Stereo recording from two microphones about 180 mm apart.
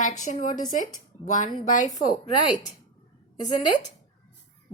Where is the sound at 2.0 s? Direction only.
25° left (ahead or behind).